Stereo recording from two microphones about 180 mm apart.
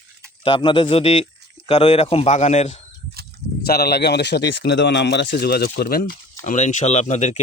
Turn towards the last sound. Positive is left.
turn(degrees=40)  # may be behind; listen again after turning